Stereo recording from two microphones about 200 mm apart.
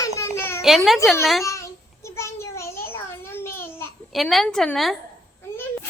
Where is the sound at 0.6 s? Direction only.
Centre (ahead or behind).